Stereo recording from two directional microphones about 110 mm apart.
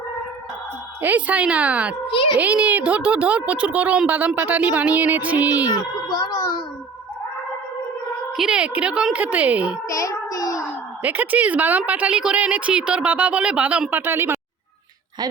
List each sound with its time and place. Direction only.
1.0 s a woman's voice: 15° right (ahead or behind)
2.1 s a child's voice: 50° left (ahead or behind)
2.4 s a woman's voice: 15° right (ahead or behind)
5.6 s a child's voice: 40° left (ahead or behind)
8.4 s a woman's voice: 5° right (ahead or behind)
9.9 s music: 30° left (ahead or behind)
11.0 s a woman's voice: 15° right (ahead or behind)